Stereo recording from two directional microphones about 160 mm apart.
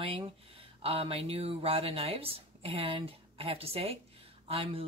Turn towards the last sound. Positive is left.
turn(degrees=-35)  # may be behind; listen again after turning